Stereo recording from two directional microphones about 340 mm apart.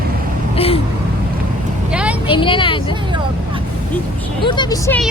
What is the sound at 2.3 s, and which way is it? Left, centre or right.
Speech, centre.